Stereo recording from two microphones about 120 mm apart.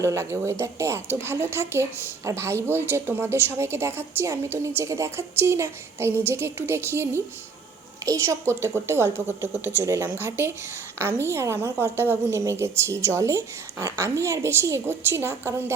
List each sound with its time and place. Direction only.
0.0 s a woman's voice: 25° right (ahead or behind)